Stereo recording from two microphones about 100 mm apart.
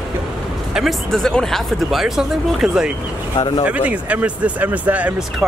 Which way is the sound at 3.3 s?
45° left (ahead or behind).